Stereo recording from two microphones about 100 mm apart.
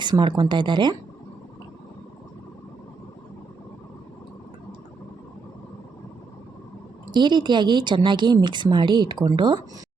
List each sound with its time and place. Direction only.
0.0 s a woman's voice: 50° right (ahead or behind)
7.1 s a woman's voice: 50° right (ahead or behind)